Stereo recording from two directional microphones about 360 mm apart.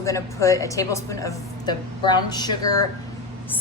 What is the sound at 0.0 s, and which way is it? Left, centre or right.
A woman's voice, centre.